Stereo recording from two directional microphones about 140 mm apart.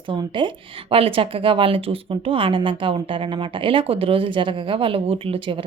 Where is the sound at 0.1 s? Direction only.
35° right (ahead or behind).